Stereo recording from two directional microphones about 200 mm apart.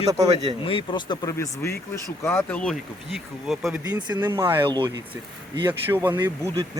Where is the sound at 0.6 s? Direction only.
25° left (ahead or behind).